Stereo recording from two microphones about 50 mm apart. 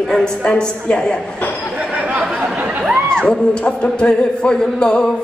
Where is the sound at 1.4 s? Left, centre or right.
Left.